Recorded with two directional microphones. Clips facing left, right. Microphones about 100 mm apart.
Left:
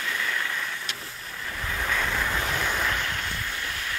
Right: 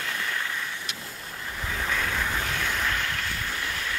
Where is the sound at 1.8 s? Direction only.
Centre (ahead or behind).